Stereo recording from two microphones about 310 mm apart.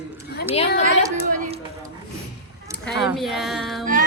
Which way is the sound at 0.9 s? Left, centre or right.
Right.